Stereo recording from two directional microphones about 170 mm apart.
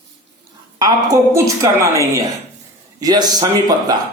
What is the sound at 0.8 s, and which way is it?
A woman's voice, 25° right (ahead or behind).